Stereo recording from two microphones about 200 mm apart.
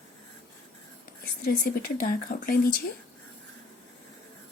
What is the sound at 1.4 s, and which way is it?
Speech, 50° left (ahead or behind).